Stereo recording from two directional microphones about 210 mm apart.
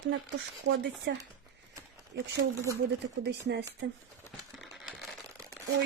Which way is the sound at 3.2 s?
55° right (ahead or behind).